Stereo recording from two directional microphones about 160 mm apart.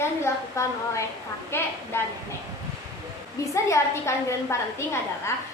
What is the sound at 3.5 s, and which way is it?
A woman's voice, 20° left (ahead or behind).